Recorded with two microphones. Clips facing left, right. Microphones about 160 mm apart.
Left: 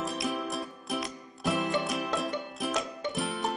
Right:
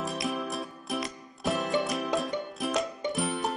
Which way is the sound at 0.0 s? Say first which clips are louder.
Even; centre (ahead or behind).